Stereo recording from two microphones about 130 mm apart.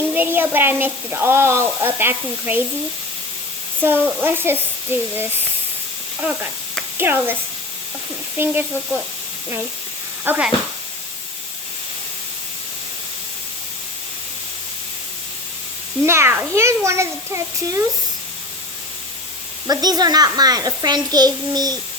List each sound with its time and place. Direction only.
0.1 s speech: 15° right (ahead or behind)
3.8 s speech: 15° right (ahead or behind)
6.9 s speech: 15° right (ahead or behind)
8.4 s speech: 15° right (ahead or behind)
10.2 s speech: 10° right (ahead or behind)
16.0 s a child's voice: 20° right (ahead or behind)
19.6 s a child's voice: 30° right (ahead or behind)